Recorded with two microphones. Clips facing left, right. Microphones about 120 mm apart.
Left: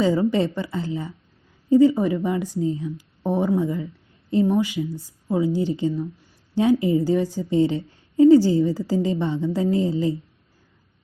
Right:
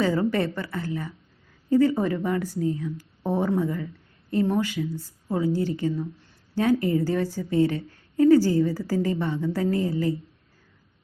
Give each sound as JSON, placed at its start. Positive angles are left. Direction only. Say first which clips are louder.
{"t": 0.0, "sound": "a woman's voice", "louder": "left 3 dB", "side_deg": 15}